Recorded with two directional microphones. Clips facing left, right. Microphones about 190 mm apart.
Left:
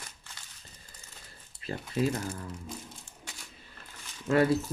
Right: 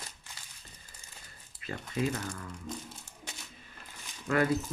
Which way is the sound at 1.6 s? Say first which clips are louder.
Left 3 dB; 35° left (ahead or behind).